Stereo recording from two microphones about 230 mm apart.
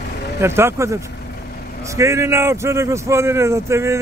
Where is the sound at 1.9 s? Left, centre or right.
Centre.